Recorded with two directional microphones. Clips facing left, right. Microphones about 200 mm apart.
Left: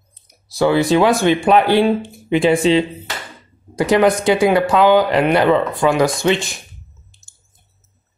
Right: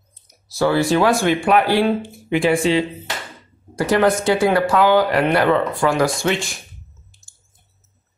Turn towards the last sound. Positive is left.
turn(degrees=20)  # may be behind; listen again after turning